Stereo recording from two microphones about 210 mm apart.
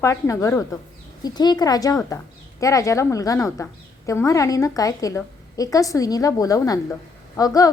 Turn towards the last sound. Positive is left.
turn(degrees=15)  # may be behind; listen again after turning